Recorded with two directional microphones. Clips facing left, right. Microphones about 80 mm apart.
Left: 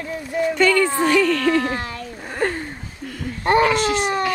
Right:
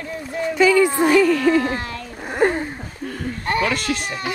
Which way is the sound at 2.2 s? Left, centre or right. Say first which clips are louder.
Right 5 dB; centre.